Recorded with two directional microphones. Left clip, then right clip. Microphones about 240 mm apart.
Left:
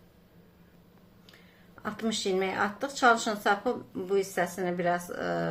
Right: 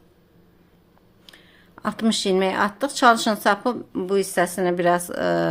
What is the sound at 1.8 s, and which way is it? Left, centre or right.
A woman's voice, right.